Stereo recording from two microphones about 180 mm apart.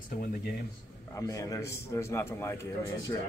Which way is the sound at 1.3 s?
20° left (ahead or behind).